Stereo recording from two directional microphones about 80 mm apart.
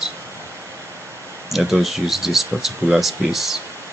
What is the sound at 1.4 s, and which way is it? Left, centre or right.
Speech, centre.